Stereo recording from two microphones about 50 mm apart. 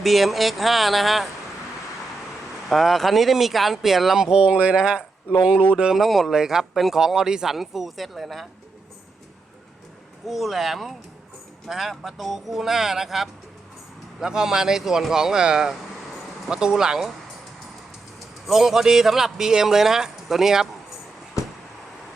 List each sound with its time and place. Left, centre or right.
0.0 s speech: centre
2.6 s speech: centre
6.0 s speech: centre
10.2 s speech: centre
18.4 s speech: centre